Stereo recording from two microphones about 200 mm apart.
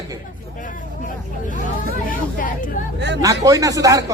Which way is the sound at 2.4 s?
40° left (ahead or behind).